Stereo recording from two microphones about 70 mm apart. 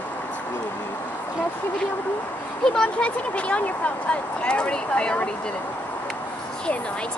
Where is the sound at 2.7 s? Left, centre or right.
Centre.